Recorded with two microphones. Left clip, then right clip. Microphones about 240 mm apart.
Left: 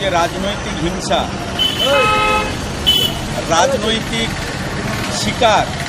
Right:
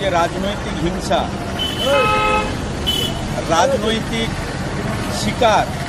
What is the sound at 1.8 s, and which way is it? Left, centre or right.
Vehicle, centre.